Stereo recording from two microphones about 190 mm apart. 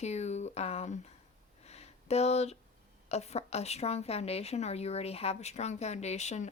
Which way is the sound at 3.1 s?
35° left (ahead or behind).